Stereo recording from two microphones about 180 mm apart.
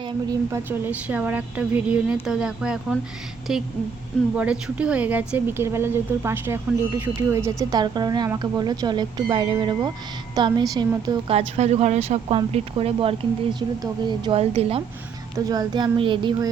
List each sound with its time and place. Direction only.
0.3 s a woman's voice: 15° right (ahead or behind)
11.3 s speech: 35° right (ahead or behind)
15.4 s a woman's voice: 20° right (ahead or behind)